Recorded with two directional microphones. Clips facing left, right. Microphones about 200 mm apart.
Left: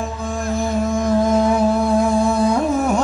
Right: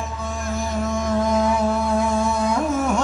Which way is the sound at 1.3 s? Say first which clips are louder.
Left 4 dB; 35° left (ahead or behind).